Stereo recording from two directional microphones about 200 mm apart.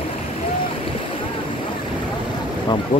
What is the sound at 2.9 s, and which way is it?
Speech, 25° left (ahead or behind).